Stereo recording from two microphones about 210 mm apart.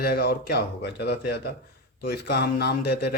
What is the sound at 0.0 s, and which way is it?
Speech, 50° left (ahead or behind).